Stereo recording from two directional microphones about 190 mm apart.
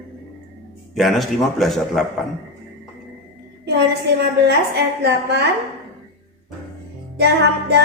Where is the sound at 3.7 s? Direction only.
60° right (ahead or behind).